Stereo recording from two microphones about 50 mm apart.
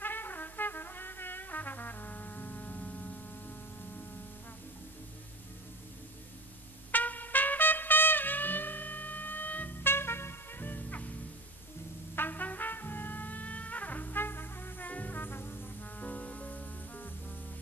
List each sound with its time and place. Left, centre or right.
0.0 s brass instrument: left
6.9 s trumpet: left
9.8 s music: left
12.2 s brass instrument: left
16.0 s music: left